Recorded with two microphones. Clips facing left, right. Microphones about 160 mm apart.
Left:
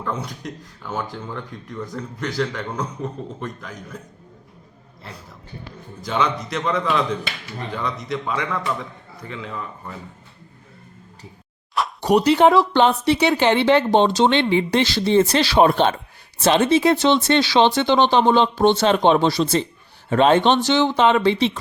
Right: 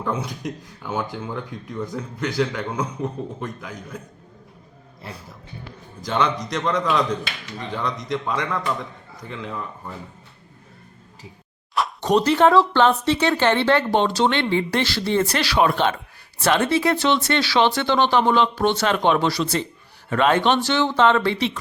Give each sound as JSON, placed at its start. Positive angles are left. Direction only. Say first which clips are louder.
{"t": 0.0, "sound": "speech", "louder": "right 2 dB", "side_deg": -10}
{"t": 6.1, "sound": "speech", "louder": "even", "side_deg": 5}
{"t": 11.9, "sound": "speech", "louder": "left 2 dB", "side_deg": 10}